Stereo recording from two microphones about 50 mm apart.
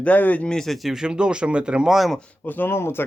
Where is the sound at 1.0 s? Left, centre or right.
Centre.